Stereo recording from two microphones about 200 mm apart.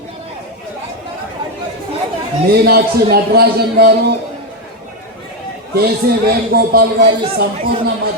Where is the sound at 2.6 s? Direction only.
50° right (ahead or behind).